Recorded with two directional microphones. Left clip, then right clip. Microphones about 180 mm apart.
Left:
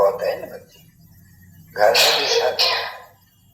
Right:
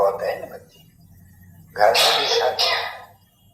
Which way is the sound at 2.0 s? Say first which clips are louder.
Left 1 dB; 20° right (ahead or behind).